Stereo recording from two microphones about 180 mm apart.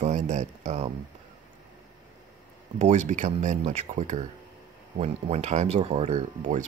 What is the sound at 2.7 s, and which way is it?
Speech, 40° right (ahead or behind).